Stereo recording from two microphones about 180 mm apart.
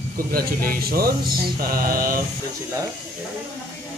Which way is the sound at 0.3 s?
55° right (ahead or behind).